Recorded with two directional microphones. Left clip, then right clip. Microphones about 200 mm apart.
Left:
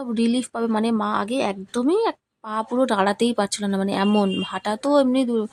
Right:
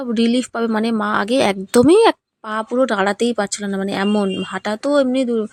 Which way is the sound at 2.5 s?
10° right (ahead or behind).